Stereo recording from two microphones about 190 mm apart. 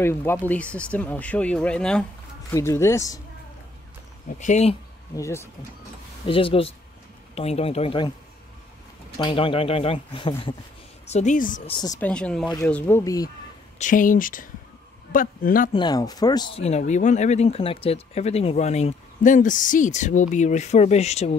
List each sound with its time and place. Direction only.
0.0 s speech: 10° left (ahead or behind)
2.5 s speech: 15° left (ahead or behind)
4.3 s speech: 40° left (ahead or behind)
5.1 s speech: 15° left (ahead or behind)
6.2 s speech: 30° left (ahead or behind)
9.2 s speech: 25° left (ahead or behind)
11.1 s speech: 40° left (ahead or behind)
12.0 s speech: 5° left (ahead or behind)
13.7 s speech: 45° left (ahead or behind)
15.7 s speech: 20° left (ahead or behind)
16.6 s speech: 35° left (ahead or behind)